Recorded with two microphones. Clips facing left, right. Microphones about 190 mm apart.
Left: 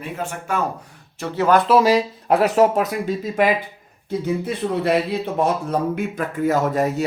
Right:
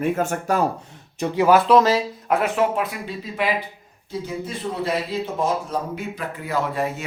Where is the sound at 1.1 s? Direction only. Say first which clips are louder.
Right 1 dB; 15° right (ahead or behind).